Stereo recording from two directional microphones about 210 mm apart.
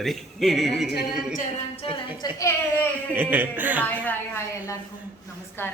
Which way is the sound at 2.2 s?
20° left (ahead or behind).